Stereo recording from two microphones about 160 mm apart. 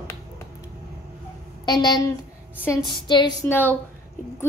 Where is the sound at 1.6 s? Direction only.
25° left (ahead or behind).